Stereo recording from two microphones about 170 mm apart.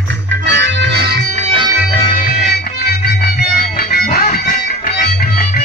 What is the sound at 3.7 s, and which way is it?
Music, 65° left (ahead or behind).